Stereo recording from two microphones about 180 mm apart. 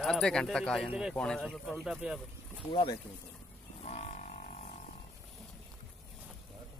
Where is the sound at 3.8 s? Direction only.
35° left (ahead or behind).